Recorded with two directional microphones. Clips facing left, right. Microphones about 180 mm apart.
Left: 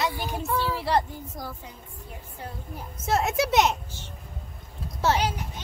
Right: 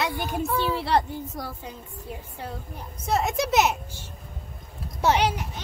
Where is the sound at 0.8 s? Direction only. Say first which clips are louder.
Right 1 dB; 65° right (ahead or behind).